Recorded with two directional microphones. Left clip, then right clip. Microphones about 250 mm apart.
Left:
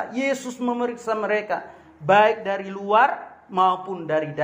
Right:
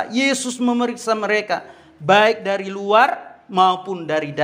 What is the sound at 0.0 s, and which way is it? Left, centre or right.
A man's voice, right.